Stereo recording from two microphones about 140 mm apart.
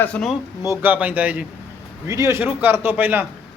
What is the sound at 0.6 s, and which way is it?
Speech, 15° right (ahead or behind).